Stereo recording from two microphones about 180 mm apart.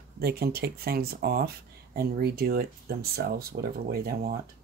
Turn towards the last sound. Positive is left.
turn(degrees=-55)  # may be behind; listen again after turning